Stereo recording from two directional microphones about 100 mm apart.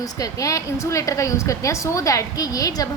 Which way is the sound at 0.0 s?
35° left (ahead or behind).